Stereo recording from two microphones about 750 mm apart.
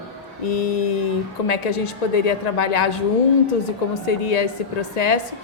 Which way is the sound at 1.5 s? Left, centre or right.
Left.